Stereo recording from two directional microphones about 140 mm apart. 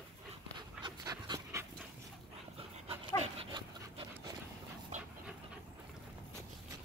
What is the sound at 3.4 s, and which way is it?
Dog, 40° right (ahead or behind).